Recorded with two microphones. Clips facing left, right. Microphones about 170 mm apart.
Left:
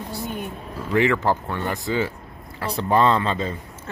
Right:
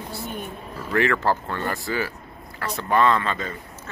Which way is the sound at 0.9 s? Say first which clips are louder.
Left 2 dB; 15° left (ahead or behind).